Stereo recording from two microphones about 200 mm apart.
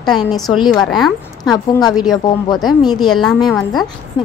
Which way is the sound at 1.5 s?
20° left (ahead or behind).